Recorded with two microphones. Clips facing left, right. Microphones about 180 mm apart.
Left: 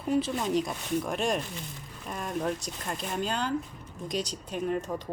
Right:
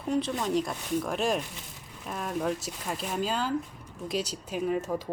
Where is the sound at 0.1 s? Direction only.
5° left (ahead or behind).